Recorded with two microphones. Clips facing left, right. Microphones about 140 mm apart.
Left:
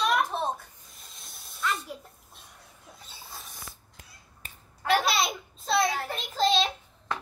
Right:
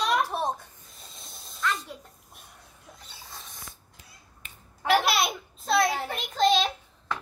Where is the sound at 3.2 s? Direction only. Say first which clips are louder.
Left 1 dB; 5° left (ahead or behind).